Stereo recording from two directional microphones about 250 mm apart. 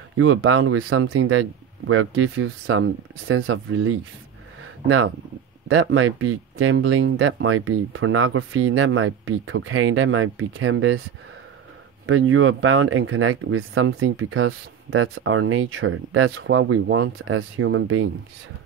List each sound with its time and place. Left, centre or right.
0.2 s speech: right
12.1 s speech: right